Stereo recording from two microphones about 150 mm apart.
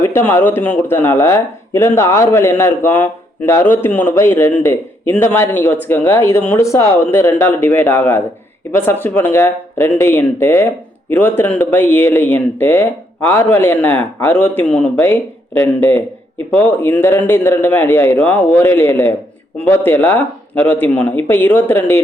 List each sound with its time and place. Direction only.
0.0 s speech: 15° left (ahead or behind)